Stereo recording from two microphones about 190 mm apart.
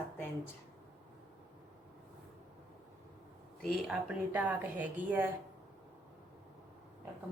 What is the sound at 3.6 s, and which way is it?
Speech, 5° left (ahead or behind).